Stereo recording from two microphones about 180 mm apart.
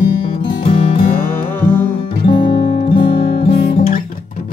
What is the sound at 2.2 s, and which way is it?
Music, 25° left (ahead or behind).